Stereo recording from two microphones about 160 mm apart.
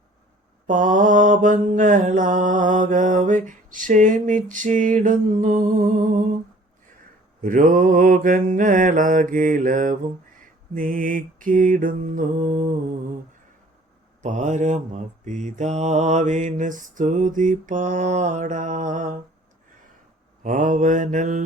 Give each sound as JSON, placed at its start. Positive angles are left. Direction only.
{"t": 0.7, "sound": "mantra", "side_deg": -55}
{"t": 7.4, "sound": "mantra", "side_deg": -55}
{"t": 14.2, "sound": "mantra", "side_deg": -45}
{"t": 20.4, "sound": "mantra", "side_deg": -55}